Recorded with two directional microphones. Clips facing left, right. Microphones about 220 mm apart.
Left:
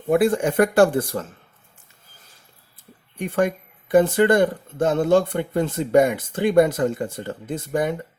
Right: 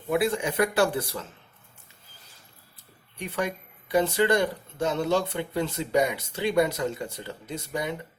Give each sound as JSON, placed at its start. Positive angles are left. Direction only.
{"t": 0.1, "sound": "speech", "side_deg": 50}
{"t": 3.2, "sound": "speech", "side_deg": 50}